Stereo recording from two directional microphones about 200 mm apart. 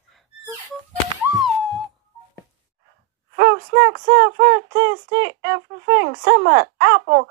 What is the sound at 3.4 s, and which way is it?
Speech, 60° right (ahead or behind).